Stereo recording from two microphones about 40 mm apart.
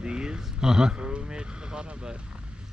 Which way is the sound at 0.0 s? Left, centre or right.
Right.